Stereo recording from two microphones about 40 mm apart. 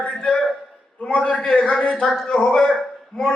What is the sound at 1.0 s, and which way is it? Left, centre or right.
Speech, left.